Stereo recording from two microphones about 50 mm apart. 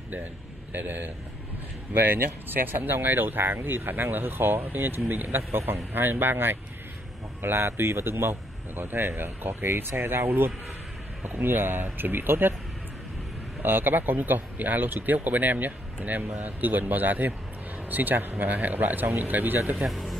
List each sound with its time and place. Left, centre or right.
0.7 s speech: right
13.6 s speech: right
19.8 s speech: centre